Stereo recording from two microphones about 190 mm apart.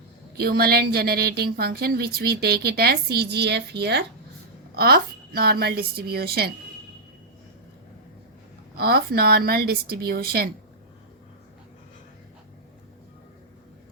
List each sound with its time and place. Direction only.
0.3 s a woman's voice: 55° right (ahead or behind)
8.8 s a woman's voice: 55° right (ahead or behind)